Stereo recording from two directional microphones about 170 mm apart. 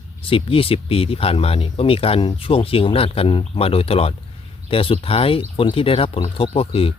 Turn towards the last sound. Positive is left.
turn(degrees=35)  # may be behind; listen again after turning